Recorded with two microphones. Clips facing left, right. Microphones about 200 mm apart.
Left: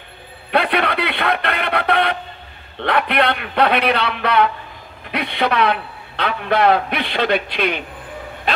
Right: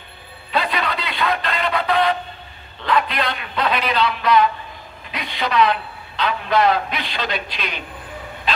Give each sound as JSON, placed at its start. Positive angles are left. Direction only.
{"t": 0.5, "sound": "a sound", "side_deg": 60}
{"t": 2.8, "sound": "a man's voice", "side_deg": 65}
{"t": 8.5, "sound": "dog", "side_deg": 60}